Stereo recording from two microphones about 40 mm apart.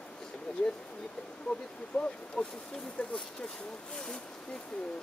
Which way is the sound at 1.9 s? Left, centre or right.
Centre.